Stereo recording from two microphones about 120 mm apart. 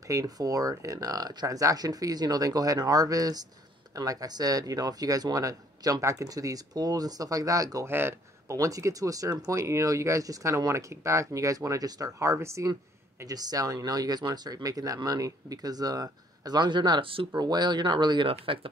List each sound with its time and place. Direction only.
0.1 s speech: 30° right (ahead or behind)
7.9 s speech: 20° right (ahead or behind); by 17.3 s 45° right (ahead or behind)
17.3 s speech: 35° right (ahead or behind)